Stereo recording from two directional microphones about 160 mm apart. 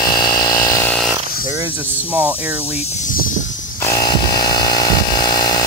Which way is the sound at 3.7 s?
20° left (ahead or behind).